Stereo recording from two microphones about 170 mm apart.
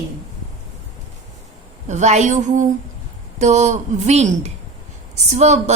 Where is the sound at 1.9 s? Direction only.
45° right (ahead or behind).